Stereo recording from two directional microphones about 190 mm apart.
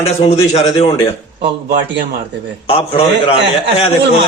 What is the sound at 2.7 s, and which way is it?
Speech, 30° left (ahead or behind).